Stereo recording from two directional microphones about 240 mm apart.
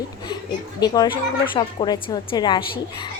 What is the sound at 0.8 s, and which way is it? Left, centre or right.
A woman's voice, centre.